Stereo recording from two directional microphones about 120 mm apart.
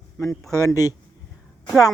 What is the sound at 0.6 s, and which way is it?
Speech, 30° left (ahead or behind).